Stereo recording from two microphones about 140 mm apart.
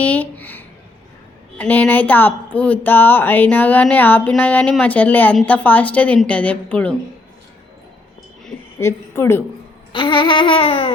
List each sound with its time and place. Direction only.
0.0 s speech: 10° left (ahead or behind)
8.8 s a woman's voice: 20° left (ahead or behind)
9.9 s babbling: 35° left (ahead or behind)